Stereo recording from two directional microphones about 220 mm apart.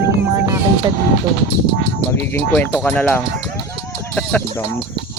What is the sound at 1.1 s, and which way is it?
Speech, 55° right (ahead or behind).